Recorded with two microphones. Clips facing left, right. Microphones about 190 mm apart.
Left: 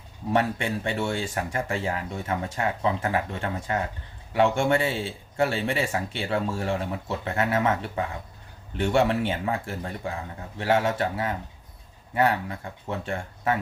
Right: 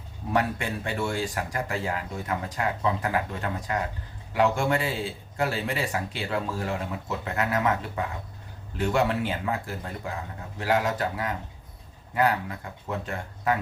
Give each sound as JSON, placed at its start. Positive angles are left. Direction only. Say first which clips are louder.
{"t": 0.3, "sound": "speech", "louder": "left 2 dB", "side_deg": 25}